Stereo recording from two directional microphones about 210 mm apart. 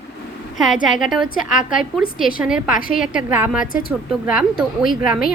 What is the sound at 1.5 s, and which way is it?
Speech, 40° left (ahead or behind).